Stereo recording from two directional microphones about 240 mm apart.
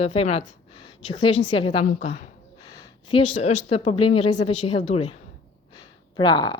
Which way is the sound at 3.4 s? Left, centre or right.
Left.